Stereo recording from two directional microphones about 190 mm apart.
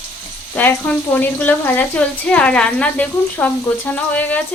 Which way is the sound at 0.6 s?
10° left (ahead or behind).